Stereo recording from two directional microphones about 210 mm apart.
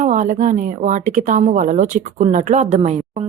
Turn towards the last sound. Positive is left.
turn(degrees=-30)  # may be behind; listen again after turning